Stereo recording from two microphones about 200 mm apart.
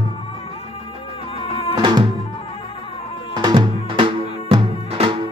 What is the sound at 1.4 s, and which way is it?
Music, 25° left (ahead or behind).